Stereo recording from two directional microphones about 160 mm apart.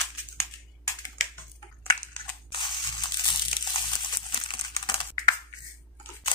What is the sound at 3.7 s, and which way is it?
Crumpling, 30° left (ahead or behind).